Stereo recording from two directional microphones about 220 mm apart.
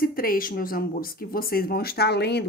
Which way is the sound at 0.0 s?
40° left (ahead or behind).